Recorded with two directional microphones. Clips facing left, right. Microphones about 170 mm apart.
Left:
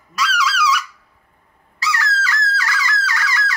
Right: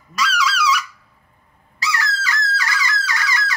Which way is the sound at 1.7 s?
20° right (ahead or behind).